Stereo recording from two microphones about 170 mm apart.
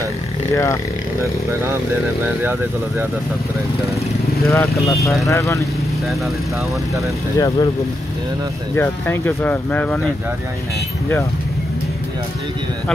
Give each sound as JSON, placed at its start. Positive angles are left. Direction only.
{"t": 4.5, "sound": "speech", "side_deg": 20}
{"t": 7.3, "sound": "speech", "side_deg": 20}
{"t": 8.7, "sound": "speech", "side_deg": 15}